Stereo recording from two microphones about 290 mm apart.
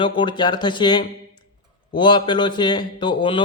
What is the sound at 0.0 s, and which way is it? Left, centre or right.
Speech, centre.